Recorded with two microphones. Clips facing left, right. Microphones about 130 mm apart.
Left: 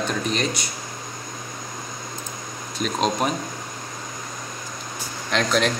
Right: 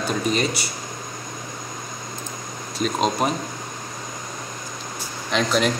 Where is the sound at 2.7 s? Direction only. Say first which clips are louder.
Right 1 dB; centre (ahead or behind).